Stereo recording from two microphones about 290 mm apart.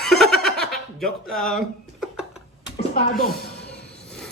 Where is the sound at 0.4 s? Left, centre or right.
Centre.